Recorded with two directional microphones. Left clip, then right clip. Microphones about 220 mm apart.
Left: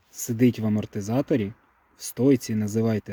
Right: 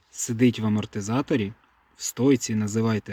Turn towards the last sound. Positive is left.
turn(degrees=5)  # may be behind; listen again after turning